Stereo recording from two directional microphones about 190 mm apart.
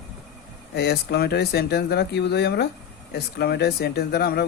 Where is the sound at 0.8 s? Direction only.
60° left (ahead or behind).